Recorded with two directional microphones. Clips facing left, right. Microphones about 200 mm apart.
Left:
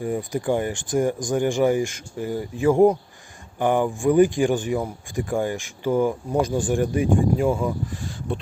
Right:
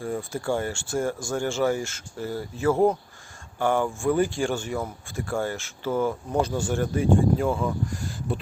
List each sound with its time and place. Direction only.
0.0 s speech: 15° left (ahead or behind)
7.9 s speech: centre (ahead or behind)